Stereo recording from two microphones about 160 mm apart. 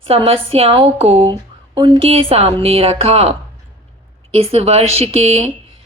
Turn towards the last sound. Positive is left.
turn(degrees=-40)  # may be behind; listen again after turning